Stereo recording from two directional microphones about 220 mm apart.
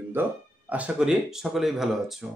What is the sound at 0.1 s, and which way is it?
Speech, 10° right (ahead or behind).